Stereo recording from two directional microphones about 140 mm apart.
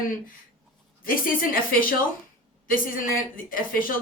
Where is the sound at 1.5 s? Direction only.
90° left.